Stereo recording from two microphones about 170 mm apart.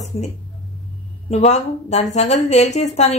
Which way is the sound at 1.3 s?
40° left (ahead or behind).